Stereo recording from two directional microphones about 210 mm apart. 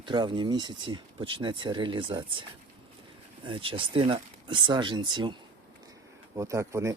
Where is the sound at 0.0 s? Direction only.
20° right (ahead or behind).